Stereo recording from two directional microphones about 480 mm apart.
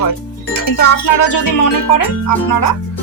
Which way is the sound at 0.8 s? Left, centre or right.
Left.